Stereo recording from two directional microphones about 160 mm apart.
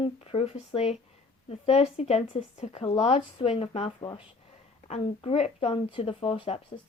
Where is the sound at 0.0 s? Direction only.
35° left (ahead or behind).